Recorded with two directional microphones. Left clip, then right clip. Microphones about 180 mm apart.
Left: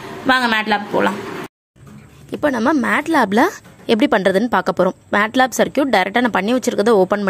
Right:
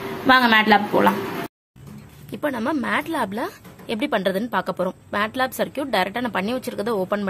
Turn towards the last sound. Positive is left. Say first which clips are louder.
# left 9 dB
turn(degrees=30)  # may be behind; listen again after turning